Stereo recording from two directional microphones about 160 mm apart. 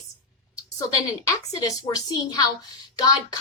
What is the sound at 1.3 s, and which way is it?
Speech, 20° left (ahead or behind).